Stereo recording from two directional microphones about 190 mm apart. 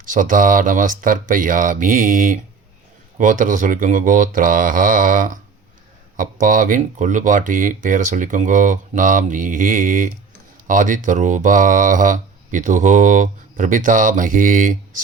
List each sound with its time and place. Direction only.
0.1 s speech: 45° right (ahead or behind)